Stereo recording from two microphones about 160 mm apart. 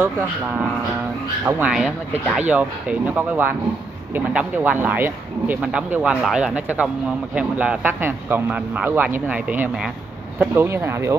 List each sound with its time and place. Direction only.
1.4 s speech: 15° right (ahead or behind)
1.7 s speech: 5° right (ahead or behind)